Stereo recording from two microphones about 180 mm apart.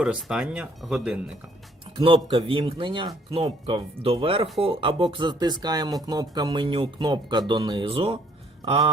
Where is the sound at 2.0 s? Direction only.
30° right (ahead or behind).